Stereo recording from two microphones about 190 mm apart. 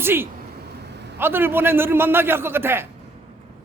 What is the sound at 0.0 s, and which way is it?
A man's voice, 10° right (ahead or behind).